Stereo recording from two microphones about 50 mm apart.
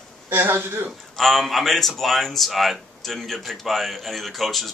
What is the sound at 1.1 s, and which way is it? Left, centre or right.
Speech, centre.